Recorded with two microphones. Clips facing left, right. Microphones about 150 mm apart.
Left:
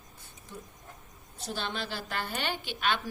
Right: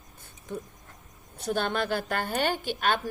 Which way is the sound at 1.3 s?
55° right (ahead or behind).